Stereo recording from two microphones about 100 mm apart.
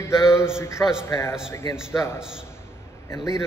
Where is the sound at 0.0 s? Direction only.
30° left (ahead or behind).